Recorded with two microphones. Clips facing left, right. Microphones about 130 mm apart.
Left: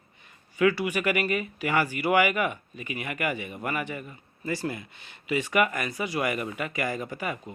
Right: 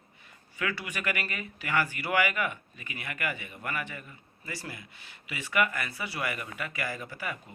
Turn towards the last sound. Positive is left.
turn(degrees=20)  # may be behind; listen again after turning